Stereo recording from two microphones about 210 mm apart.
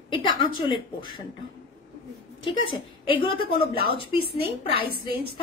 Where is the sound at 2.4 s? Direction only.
25° left (ahead or behind).